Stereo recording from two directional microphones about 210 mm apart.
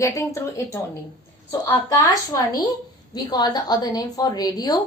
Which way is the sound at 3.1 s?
20° left (ahead or behind).